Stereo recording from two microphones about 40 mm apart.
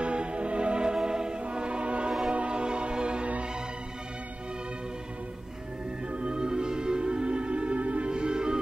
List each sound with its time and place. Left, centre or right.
0.0 s music: right
6.1 s music: right